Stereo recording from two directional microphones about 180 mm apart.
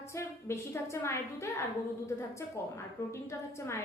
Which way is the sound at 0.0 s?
15° left (ahead or behind).